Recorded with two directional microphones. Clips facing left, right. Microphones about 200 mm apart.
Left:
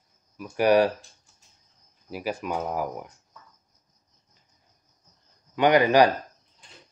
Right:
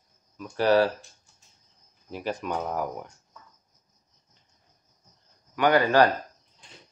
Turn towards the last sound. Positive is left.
turn(degrees=15)  # may be behind; listen again after turning